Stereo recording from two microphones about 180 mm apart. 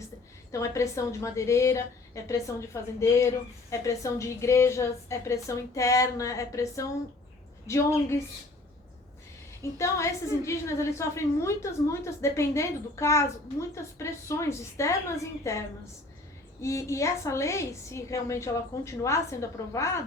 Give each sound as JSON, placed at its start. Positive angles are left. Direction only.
{"t": 0.5, "sound": "a woman's voice", "side_deg": 15}
{"t": 9.7, "sound": "a woman's voice", "side_deg": 15}